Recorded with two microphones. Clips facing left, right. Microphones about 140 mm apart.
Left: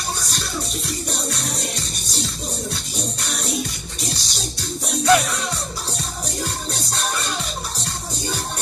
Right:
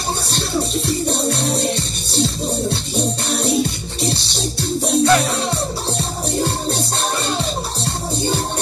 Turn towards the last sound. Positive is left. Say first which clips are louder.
# right 7 dB
turn(degrees=-30)  # may be behind; listen again after turning